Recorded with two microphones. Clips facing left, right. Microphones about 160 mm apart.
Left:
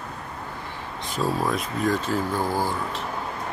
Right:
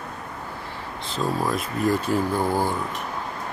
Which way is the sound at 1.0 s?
15° left (ahead or behind).